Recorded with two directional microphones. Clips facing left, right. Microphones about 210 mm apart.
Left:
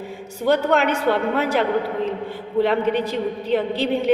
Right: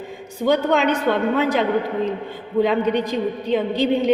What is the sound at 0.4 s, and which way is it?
A woman's voice, 10° left (ahead or behind).